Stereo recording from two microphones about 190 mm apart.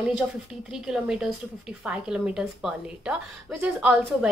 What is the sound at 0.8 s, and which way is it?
A woman's voice, 5° right (ahead or behind).